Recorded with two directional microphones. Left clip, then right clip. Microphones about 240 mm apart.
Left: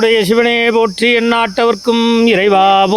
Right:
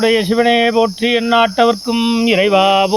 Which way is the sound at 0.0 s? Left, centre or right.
Left.